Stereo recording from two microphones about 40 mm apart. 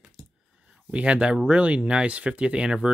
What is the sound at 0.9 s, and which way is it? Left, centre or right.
Speech, right.